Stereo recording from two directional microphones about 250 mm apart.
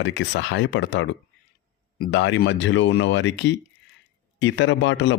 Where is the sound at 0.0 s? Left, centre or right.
Left.